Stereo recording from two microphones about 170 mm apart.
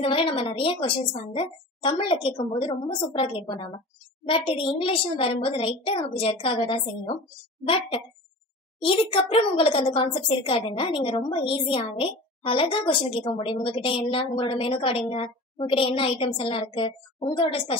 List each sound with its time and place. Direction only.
0.0 s speech: 30° left (ahead or behind)